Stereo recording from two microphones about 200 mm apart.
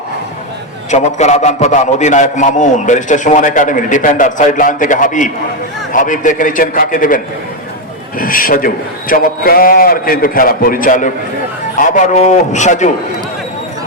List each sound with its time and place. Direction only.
0.9 s a man's voice: 35° left (ahead or behind)
8.2 s a man's voice: 45° left (ahead or behind)